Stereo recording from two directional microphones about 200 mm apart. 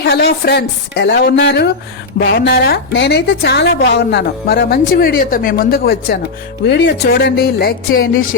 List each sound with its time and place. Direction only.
0.0 s a woman's voice: 55° left (ahead or behind)